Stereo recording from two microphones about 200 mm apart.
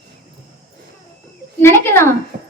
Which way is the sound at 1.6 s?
10° left (ahead or behind).